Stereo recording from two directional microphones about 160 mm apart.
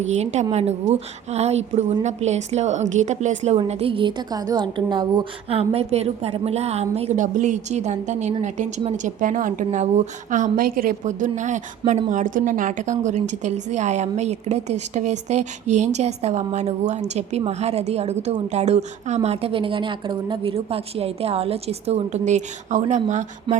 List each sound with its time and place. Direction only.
0.0 s a woman's voice: 45° right (ahead or behind)